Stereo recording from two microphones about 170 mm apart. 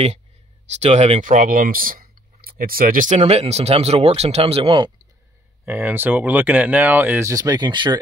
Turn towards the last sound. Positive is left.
turn(degrees=-25)  # may be behind; listen again after turning